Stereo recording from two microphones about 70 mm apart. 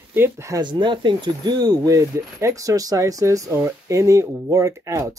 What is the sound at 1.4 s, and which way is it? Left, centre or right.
Speech, right.